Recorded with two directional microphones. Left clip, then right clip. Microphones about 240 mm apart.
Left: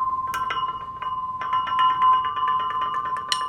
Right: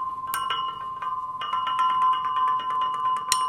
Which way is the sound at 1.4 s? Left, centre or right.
Right.